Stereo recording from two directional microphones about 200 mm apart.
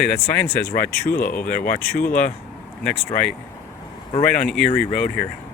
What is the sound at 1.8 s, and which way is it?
Speech, 10° left (ahead or behind).